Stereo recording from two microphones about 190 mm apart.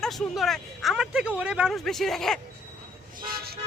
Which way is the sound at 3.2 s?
50° right (ahead or behind).